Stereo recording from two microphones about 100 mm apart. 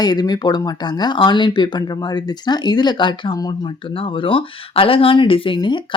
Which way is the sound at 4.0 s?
60° left (ahead or behind).